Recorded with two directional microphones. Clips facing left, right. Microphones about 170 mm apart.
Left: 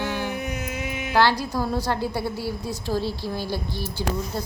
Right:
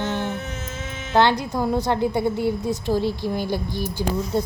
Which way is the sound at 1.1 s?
20° right (ahead or behind).